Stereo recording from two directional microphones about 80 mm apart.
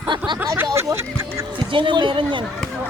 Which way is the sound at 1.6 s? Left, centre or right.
Right.